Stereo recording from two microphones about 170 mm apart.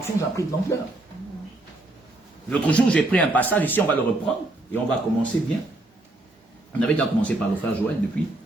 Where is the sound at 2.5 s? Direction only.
5° left (ahead or behind).